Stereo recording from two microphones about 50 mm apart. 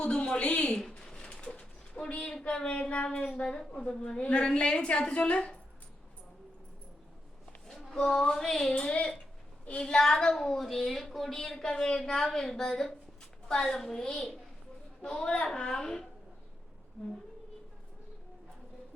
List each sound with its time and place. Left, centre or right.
0.0 s a woman's voice: centre
0.8 s pigeon: centre
2.9 s a woman's voice: left
7.9 s a woman's voice: centre
8.7 s a woman's voice: left